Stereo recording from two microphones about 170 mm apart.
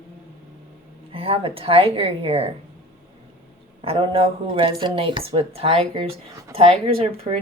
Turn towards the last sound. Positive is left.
turn(degrees=-35)  # may be behind; listen again after turning